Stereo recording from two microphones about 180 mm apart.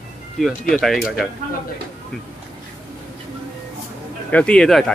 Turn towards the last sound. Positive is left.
turn(degrees=5)  # may be behind; listen again after turning